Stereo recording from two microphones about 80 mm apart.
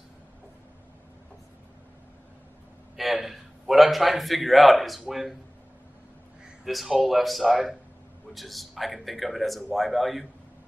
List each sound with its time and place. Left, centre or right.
3.0 s a man's voice: centre
6.6 s a man's voice: centre